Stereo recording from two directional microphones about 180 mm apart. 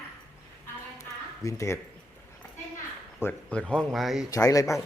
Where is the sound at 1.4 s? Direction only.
15° left (ahead or behind).